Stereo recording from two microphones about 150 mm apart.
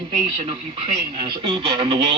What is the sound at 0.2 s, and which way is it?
Speech, 35° right (ahead or behind).